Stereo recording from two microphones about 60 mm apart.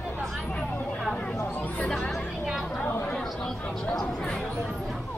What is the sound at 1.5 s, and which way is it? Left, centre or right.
Chatter, left.